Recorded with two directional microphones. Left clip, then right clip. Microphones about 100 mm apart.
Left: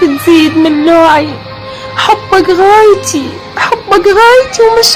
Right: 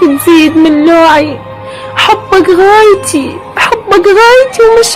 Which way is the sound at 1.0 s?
60° right (ahead or behind).